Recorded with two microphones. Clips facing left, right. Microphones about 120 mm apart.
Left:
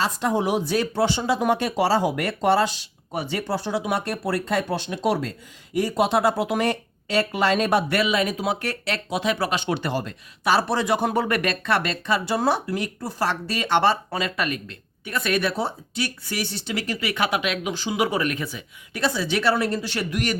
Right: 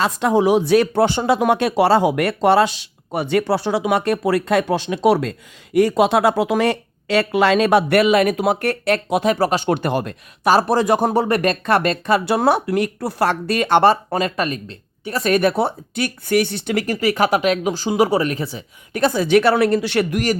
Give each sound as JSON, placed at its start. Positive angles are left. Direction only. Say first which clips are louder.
{"t": 0.0, "sound": "speech", "louder": "right 6 dB", "side_deg": -85}
{"t": 10.5, "sound": "speech", "louder": "right 6 dB", "side_deg": -40}
{"t": 11.1, "sound": "speech", "louder": "right 6 dB", "side_deg": -30}
{"t": 15.5, "sound": "speech", "louder": "right 6 dB", "side_deg": -55}
{"t": 18.9, "sound": "speech", "louder": "right 9 dB", "side_deg": -50}